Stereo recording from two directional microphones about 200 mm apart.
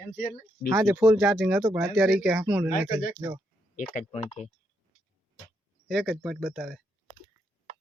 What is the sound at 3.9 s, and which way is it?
Speech, 35° left (ahead or behind).